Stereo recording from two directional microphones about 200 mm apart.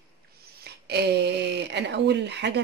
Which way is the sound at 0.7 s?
55° right (ahead or behind).